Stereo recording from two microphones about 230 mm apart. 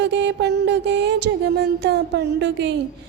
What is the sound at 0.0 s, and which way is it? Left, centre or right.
Music, right.